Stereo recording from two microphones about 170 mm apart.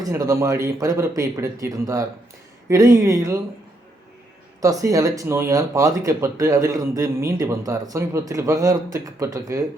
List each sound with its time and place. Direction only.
0.1 s speech: 15° right (ahead or behind)
4.6 s speech: 20° right (ahead or behind)